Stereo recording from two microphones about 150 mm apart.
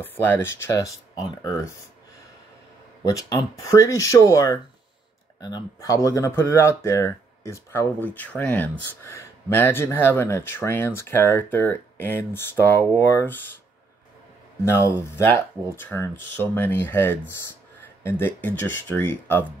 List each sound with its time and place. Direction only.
0.0 s speech: 15° left (ahead or behind)
3.1 s speech: 20° left (ahead or behind)
14.6 s speech: 15° left (ahead or behind)